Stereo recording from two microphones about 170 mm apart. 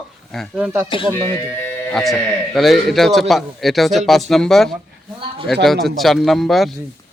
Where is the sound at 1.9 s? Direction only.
Centre (ahead or behind).